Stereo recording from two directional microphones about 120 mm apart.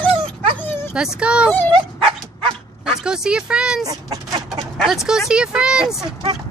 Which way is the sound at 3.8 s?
30° right (ahead or behind).